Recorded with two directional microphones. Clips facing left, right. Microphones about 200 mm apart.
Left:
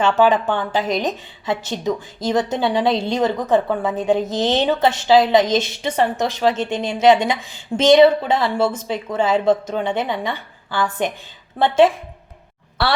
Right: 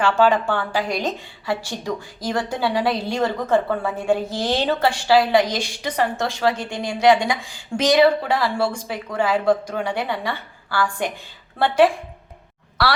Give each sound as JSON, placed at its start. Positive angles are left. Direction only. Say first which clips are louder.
{"t": 0.0, "sound": "a woman's voice", "louder": "left 2 dB", "side_deg": 20}